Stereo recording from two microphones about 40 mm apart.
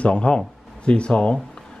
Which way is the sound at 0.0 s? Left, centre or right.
Left.